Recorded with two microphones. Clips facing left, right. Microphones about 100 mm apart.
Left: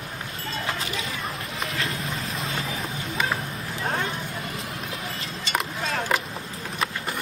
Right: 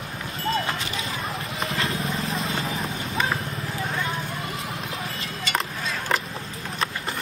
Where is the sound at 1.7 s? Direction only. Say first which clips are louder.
Right 4 dB; 30° right (ahead or behind).